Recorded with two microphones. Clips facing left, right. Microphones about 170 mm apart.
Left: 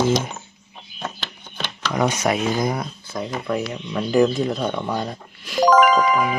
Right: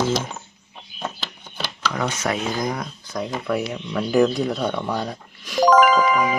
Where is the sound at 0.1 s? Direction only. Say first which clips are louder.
Left 3 dB; 5° right (ahead or behind).